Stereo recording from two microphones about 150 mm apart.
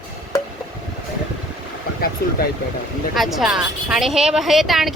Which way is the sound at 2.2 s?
90° left.